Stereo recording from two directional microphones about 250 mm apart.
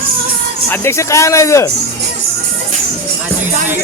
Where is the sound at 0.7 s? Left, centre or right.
Centre.